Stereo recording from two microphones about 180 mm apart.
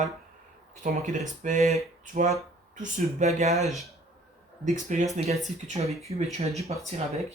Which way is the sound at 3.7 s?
Centre (ahead or behind).